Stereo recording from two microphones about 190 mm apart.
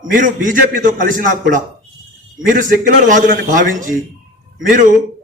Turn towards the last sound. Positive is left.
turn(degrees=-45)  # may be behind; listen again after turning